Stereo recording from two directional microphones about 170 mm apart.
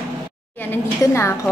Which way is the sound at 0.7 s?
15° left (ahead or behind).